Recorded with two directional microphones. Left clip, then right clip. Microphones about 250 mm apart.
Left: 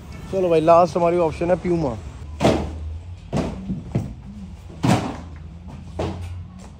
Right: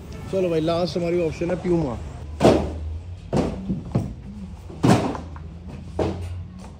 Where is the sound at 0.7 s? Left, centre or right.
Left.